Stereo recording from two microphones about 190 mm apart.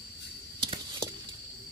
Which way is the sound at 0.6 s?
25° right (ahead or behind).